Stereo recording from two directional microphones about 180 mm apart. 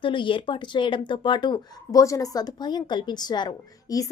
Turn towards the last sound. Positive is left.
turn(degrees=20)  # may be behind; listen again after turning